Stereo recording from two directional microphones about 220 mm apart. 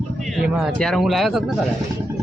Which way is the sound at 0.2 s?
Centre (ahead or behind).